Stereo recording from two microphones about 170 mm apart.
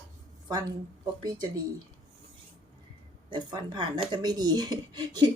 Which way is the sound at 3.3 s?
25° right (ahead or behind).